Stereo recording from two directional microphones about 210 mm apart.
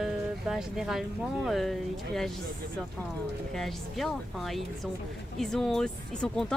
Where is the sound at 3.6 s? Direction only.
Centre (ahead or behind).